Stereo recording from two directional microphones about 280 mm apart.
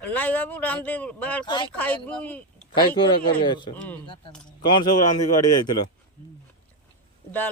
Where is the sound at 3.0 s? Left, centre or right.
Centre.